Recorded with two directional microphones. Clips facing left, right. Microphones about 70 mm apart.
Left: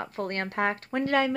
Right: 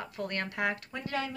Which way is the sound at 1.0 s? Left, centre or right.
Left.